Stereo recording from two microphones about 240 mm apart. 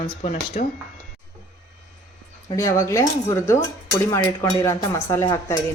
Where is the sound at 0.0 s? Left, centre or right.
Left.